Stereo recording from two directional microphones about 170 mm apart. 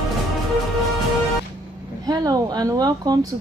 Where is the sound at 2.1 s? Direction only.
20° right (ahead or behind).